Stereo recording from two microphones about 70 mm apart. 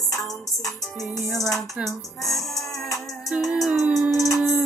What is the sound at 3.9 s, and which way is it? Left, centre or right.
Music, centre.